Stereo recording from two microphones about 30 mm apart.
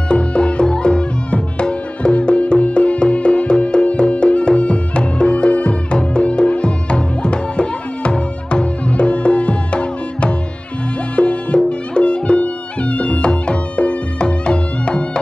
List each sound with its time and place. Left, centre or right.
0.1 s music: left